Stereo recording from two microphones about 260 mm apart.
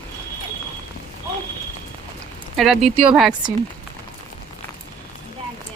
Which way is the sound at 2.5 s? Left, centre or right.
Centre.